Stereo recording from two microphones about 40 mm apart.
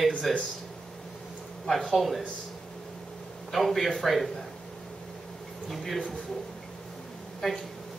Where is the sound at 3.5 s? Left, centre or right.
Centre.